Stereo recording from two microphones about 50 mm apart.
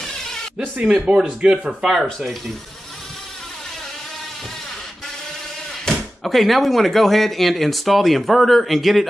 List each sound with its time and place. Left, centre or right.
1.0 s speech: right
1.7 s speech: centre
5.9 s speech: centre